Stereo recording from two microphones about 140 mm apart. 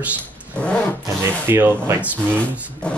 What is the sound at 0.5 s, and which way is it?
Speech, 10° left (ahead or behind).